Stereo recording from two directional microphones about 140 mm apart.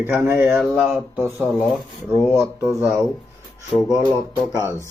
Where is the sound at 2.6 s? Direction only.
20° right (ahead or behind).